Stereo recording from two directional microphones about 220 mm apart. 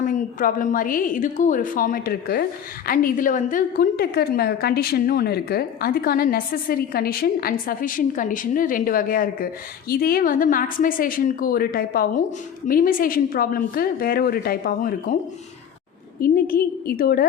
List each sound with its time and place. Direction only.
0.0 s a woman's voice: 35° left (ahead or behind)
16.2 s a woman's voice: 40° left (ahead or behind)